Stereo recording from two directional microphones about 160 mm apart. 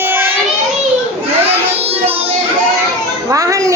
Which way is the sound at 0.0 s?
15° right (ahead or behind).